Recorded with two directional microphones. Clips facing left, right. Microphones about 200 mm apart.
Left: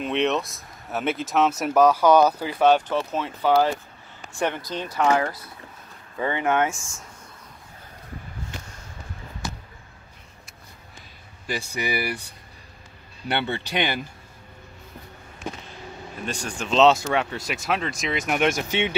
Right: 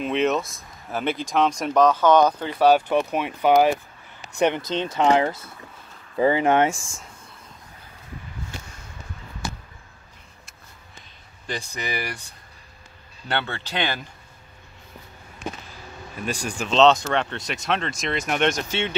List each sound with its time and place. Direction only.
0.0 s speech: centre (ahead or behind)
2.9 s speech: 15° right (ahead or behind)
6.1 s speech: 30° right (ahead or behind)
11.4 s speech: 10° left (ahead or behind)
13.3 s speech: 15° left (ahead or behind)
16.3 s speech: 10° right (ahead or behind)
16.7 s speech: 5° left (ahead or behind)
18.7 s speech: 15° left (ahead or behind)